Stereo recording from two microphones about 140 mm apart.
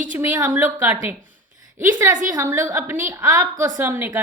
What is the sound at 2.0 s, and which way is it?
A woman's voice, 20° right (ahead or behind).